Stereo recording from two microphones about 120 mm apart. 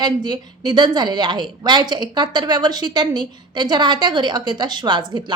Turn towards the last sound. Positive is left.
turn(degrees=-40)  # may be behind; listen again after turning